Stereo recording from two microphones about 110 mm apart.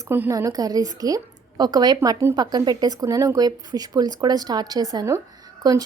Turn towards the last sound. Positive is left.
turn(degrees=-35)  # may be behind; listen again after turning